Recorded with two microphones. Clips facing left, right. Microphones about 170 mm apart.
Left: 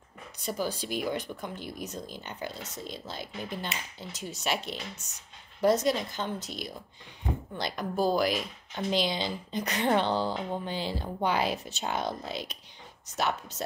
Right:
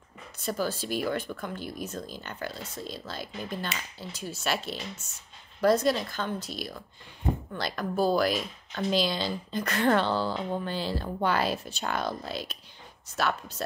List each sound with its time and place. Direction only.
0.5 s speech: 15° left (ahead or behind)